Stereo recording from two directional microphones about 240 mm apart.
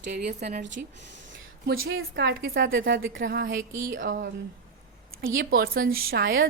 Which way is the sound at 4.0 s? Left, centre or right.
Right.